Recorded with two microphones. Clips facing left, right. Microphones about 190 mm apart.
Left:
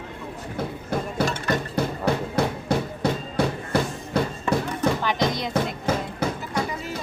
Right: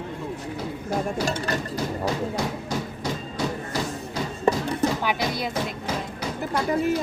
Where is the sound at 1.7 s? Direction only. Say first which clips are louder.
Left 2 dB; 60° left (ahead or behind).